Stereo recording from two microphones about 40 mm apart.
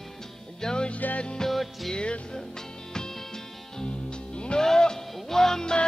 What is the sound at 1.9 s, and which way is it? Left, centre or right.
Music, left.